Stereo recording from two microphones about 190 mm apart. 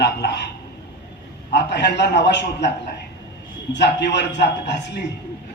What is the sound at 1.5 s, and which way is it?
A man's voice, 65° left (ahead or behind).